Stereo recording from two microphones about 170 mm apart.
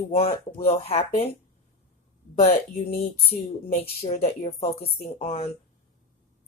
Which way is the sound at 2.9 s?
35° left (ahead or behind).